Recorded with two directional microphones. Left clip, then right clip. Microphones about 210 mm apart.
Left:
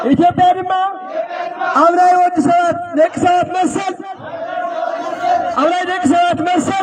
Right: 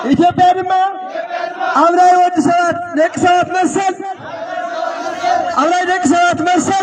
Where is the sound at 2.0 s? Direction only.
45° left (ahead or behind).